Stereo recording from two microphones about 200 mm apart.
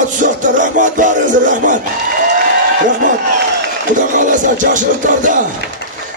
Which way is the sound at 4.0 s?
40° right (ahead or behind).